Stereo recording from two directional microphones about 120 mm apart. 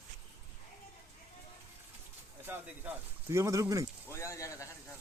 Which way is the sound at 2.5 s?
20° right (ahead or behind).